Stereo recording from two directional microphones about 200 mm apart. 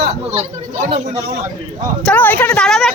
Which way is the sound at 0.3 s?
30° right (ahead or behind).